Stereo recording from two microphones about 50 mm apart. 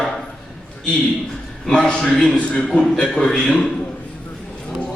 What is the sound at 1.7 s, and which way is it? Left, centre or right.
A man's voice, centre.